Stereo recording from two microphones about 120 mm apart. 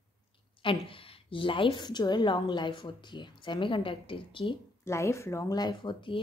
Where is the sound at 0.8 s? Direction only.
45° left (ahead or behind).